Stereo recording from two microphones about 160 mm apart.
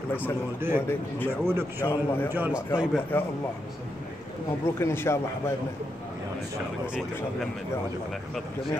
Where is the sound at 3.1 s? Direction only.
10° left (ahead or behind).